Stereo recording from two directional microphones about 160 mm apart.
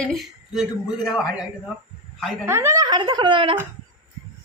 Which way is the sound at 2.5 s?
15° right (ahead or behind).